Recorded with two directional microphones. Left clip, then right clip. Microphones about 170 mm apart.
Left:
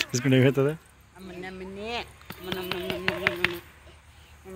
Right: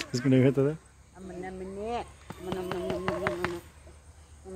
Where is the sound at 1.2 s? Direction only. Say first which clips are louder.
Left 1 dB; 45° right (ahead or behind).